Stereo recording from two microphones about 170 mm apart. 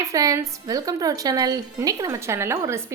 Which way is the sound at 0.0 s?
20° right (ahead or behind).